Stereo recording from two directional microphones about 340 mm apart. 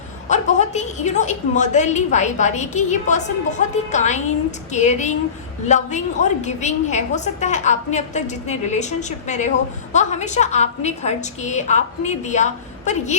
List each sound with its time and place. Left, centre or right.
0.3 s a woman's voice: left